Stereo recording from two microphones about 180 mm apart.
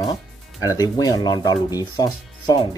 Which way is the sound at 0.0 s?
20° left (ahead or behind).